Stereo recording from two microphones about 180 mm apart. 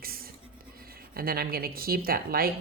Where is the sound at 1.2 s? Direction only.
55° right (ahead or behind).